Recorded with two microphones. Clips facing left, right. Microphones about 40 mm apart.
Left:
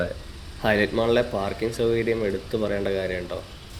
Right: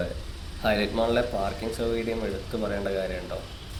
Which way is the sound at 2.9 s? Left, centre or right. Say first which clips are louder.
Left 3 dB; left.